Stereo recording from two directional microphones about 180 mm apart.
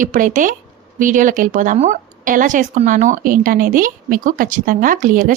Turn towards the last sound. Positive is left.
turn(degrees=-45)  # may be behind; listen again after turning